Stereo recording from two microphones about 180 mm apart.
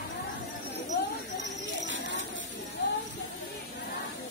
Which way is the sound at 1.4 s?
90° right.